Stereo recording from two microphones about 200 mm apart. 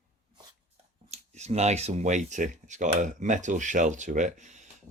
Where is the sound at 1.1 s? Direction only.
35° right (ahead or behind).